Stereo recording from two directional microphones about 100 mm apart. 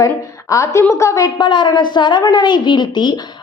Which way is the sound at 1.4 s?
50° left (ahead or behind).